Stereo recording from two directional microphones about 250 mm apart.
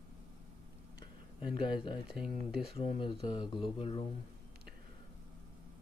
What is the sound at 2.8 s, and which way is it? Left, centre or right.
Speech, left.